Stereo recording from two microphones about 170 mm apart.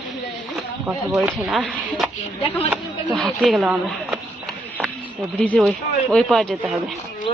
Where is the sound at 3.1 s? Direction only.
Centre (ahead or behind).